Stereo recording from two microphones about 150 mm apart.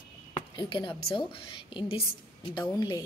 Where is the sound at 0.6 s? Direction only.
30° left (ahead or behind).